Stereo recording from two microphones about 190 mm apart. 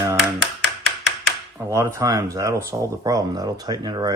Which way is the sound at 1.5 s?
15° right (ahead or behind).